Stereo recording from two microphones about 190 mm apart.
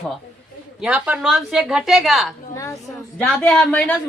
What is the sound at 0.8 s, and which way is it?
A woman's voice, 5° right (ahead or behind).